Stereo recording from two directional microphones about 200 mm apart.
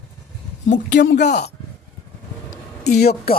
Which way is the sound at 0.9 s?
60° left (ahead or behind).